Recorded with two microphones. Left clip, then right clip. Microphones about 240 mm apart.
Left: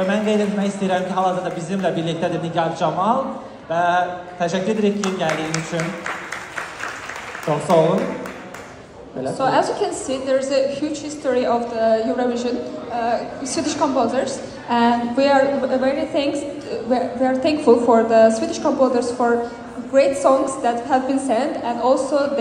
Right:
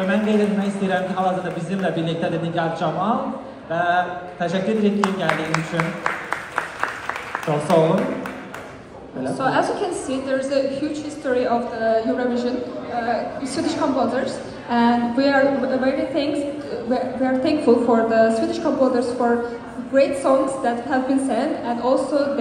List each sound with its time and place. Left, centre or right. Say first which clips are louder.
0.1 s a woman's voice: even; left
5.0 s speech: even; centre
9.2 s a woman's voice: left 2 dB; left
13.7 s a woman's voice: left 2 dB; left